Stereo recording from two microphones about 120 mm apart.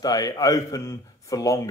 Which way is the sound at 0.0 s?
30° left (ahead or behind).